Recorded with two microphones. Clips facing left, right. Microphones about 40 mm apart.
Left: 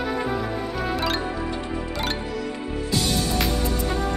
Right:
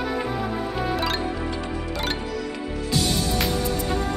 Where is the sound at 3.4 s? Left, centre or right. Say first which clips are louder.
Even; centre.